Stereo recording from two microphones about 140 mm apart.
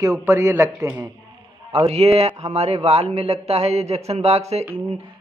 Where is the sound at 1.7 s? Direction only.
45° right (ahead or behind).